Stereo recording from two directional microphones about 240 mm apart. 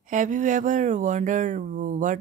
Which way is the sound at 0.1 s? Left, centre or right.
Right.